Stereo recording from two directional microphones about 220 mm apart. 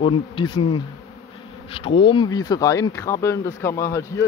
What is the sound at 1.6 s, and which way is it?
Speech, 25° left (ahead or behind).